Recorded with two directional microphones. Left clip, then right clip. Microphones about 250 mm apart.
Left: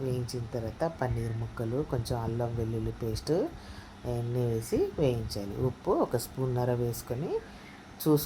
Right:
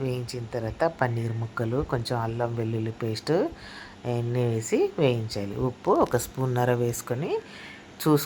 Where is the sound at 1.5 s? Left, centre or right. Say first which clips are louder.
Right 5 dB; right.